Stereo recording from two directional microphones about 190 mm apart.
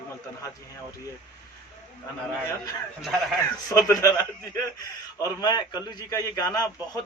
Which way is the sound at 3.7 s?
15° left (ahead or behind).